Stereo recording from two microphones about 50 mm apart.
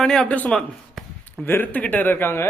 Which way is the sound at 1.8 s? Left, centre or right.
Left.